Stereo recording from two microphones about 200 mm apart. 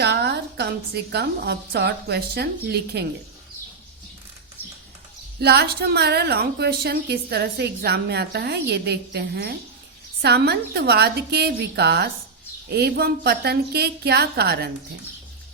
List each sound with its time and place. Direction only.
0.0 s a woman's voice: 55° right (ahead or behind)
5.4 s a woman's voice: 55° right (ahead or behind)